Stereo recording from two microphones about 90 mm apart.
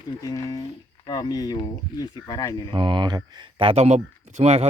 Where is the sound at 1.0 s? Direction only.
55° left (ahead or behind); by 2.6 s 40° left (ahead or behind).